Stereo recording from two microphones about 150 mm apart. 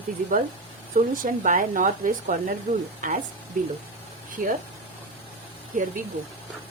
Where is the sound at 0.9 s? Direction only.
65° right (ahead or behind).